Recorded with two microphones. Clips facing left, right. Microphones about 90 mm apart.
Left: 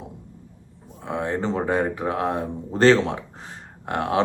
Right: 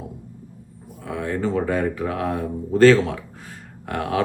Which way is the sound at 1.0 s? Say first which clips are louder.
Even; 25° left (ahead or behind).